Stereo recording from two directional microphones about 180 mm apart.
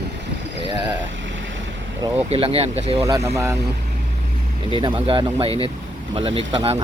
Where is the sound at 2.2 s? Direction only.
30° right (ahead or behind).